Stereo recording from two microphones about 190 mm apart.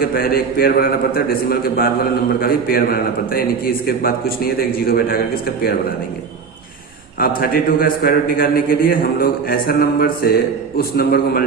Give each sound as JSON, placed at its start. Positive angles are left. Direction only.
{"t": 0.0, "sound": "a man's voice", "side_deg": 50}
{"t": 7.2, "sound": "a man's voice", "side_deg": 50}